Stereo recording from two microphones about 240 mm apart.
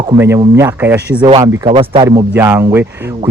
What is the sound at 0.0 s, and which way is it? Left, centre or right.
Speech, centre.